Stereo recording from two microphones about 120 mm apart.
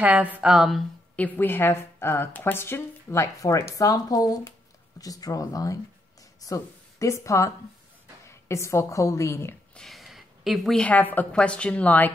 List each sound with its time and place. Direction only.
0.0 s speech: 15° right (ahead or behind)
1.1 s a woman's voice: 15° left (ahead or behind)
9.8 s a woman's voice: centre (ahead or behind)